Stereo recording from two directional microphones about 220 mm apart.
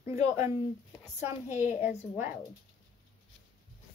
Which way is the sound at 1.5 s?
35° left (ahead or behind).